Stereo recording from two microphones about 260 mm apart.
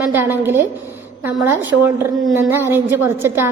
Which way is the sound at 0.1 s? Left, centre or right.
Centre.